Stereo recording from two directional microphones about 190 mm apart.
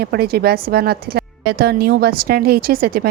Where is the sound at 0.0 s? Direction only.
55° right (ahead or behind).